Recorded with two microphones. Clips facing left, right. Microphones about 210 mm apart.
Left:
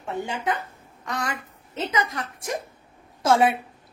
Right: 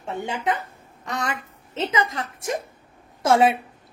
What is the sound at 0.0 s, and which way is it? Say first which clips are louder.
A woman's voice: right 1 dB; 20° right (ahead or behind).